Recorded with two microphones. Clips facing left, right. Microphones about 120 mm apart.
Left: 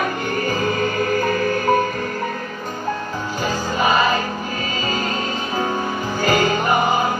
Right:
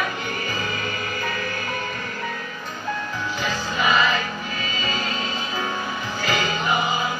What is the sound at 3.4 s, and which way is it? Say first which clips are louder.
Music: left 4 dB; 40° left (ahead or behind).